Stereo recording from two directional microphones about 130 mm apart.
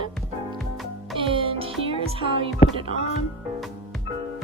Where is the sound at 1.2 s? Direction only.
45° right (ahead or behind).